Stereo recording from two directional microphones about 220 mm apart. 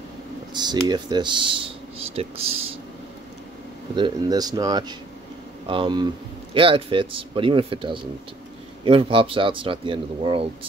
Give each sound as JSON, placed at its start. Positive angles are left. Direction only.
{"t": 0.5, "sound": "speech", "side_deg": -20}
{"t": 3.9, "sound": "speech", "side_deg": -20}